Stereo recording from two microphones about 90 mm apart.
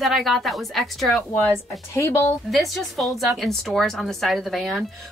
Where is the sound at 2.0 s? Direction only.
30° left (ahead or behind).